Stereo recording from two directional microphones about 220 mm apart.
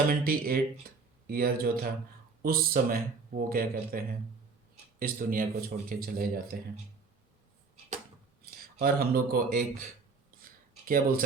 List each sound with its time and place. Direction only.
0.1 s speech: 40° right (ahead or behind)
8.4 s speech: 45° right (ahead or behind)
10.4 s a sound: 40° right (ahead or behind)